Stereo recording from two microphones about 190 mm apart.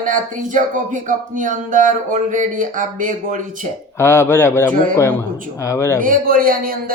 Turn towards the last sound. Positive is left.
turn(degrees=-50)  # may be behind; listen again after turning